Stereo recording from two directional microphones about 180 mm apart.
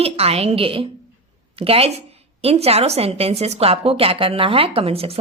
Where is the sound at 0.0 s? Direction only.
35° right (ahead or behind).